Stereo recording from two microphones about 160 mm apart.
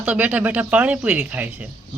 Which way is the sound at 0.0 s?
10° right (ahead or behind).